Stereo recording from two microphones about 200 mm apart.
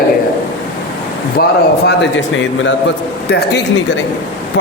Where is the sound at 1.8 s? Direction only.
65° left (ahead or behind).